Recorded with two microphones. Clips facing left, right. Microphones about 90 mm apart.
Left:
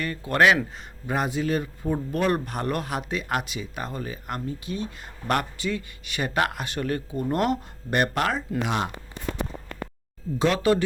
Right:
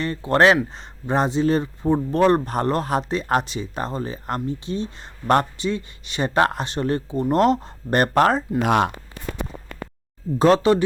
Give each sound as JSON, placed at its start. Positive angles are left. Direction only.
{"t": 0.0, "sound": "speech", "side_deg": -25}
{"t": 8.6, "sound": "speech", "side_deg": -55}
{"t": 10.3, "sound": "speech", "side_deg": -40}
{"t": 10.6, "sound": "speech", "side_deg": -20}